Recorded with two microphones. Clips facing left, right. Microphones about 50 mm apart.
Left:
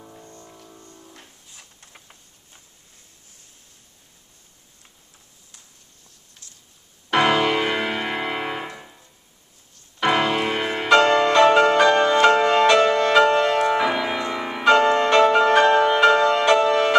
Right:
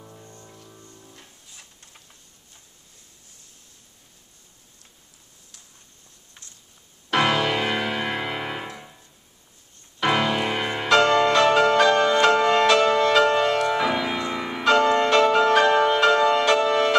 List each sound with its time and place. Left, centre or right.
0.0 s music: centre
1.8 s a sound: left
7.1 s music: centre